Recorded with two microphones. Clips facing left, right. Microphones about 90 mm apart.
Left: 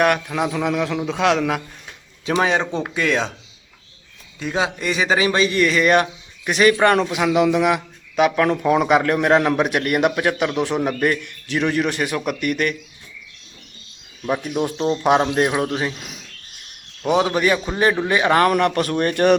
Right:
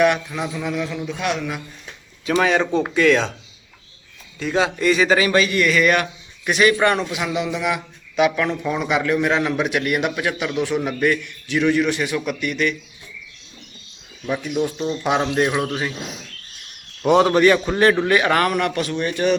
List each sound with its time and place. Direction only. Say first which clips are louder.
0.0 s a man's voice: even; 55° left (ahead or behind); by 1.6 s 90° left
2.3 s a man's voice: right 1 dB; 20° left (ahead or behind)
4.4 s a man's voice: right 2 dB; 15° left (ahead or behind); by 7.3 s 40° left (ahead or behind)
7.3 s a man's voice: left 8 dB; 55° left (ahead or behind)
14.3 s a man's voice: left 1 dB; 40° left (ahead or behind)
17.1 s a man's voice: right 4 dB; 5° left (ahead or behind); by 19.4 s 60° left (ahead or behind)